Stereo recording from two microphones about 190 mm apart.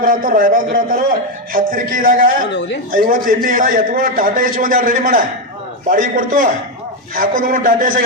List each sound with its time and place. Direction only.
0.0 s a man's voice: 45° right (ahead or behind)
2.5 s speech: 65° left (ahead or behind)
2.9 s a man's voice: 50° right (ahead or behind)